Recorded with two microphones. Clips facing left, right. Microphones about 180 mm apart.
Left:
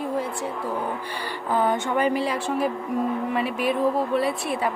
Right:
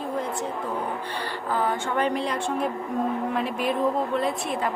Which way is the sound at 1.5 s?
20° left (ahead or behind).